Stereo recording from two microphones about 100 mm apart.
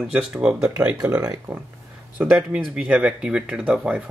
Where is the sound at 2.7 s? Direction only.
15° right (ahead or behind).